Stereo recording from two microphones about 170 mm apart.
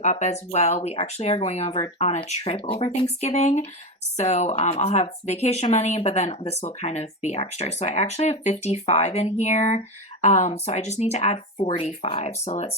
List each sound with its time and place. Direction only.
0.0 s speech: 45° left (ahead or behind)